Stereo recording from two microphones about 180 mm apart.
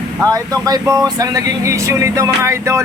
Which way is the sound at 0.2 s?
20° right (ahead or behind).